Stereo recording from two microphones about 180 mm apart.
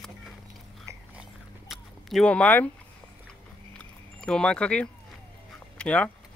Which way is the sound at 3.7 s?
5° left (ahead or behind).